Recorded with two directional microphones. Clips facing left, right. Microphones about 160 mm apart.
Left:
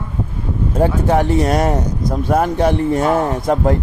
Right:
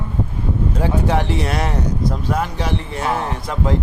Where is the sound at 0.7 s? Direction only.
50° left (ahead or behind).